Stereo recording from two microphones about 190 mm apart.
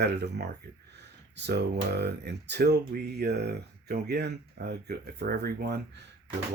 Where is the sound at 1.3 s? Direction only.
60° right (ahead or behind).